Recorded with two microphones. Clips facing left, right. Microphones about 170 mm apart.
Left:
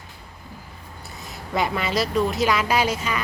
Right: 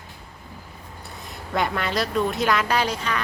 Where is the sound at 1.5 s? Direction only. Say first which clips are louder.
Left 1 dB; 5° left (ahead or behind).